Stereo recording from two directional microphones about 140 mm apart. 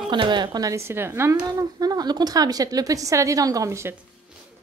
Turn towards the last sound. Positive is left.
turn(degrees=-20)  # may be behind; listen again after turning